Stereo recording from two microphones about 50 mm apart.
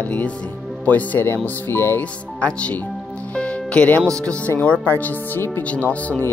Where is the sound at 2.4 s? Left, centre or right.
Left.